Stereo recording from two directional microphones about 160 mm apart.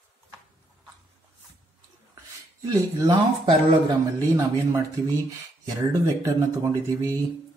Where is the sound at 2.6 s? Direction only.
20° right (ahead or behind).